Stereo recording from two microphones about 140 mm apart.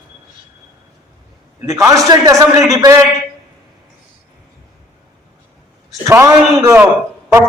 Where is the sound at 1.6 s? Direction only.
25° right (ahead or behind).